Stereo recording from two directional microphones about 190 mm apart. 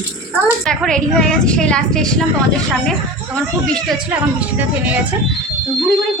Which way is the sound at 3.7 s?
5° right (ahead or behind).